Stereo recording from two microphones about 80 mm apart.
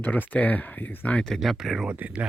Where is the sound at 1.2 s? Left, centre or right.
Centre.